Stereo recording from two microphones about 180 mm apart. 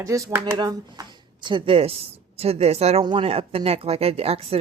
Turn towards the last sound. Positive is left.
turn(degrees=-35)  # may be behind; listen again after turning